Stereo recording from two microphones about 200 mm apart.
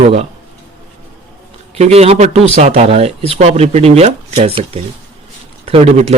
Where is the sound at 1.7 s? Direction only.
30° right (ahead or behind).